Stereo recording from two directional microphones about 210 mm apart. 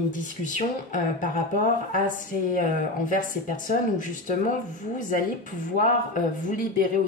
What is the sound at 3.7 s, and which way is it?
Speech, 40° left (ahead or behind).